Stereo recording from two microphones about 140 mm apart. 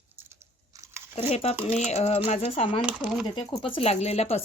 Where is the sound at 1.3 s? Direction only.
50° left (ahead or behind).